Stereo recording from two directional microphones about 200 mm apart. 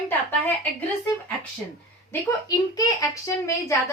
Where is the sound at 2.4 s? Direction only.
15° left (ahead or behind).